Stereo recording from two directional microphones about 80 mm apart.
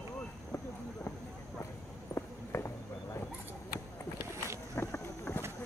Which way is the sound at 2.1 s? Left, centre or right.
Left.